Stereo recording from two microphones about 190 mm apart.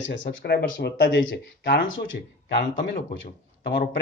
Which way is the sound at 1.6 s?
75° left (ahead or behind).